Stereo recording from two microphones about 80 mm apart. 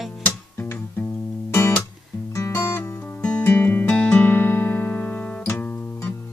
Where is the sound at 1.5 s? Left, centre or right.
Left.